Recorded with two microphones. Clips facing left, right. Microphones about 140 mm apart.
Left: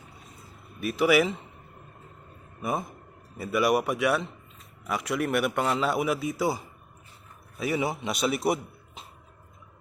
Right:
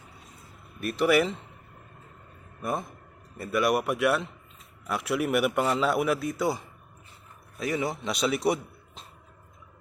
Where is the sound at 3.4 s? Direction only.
Centre (ahead or behind).